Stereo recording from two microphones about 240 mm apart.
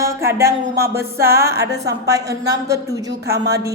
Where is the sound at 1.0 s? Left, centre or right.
Centre.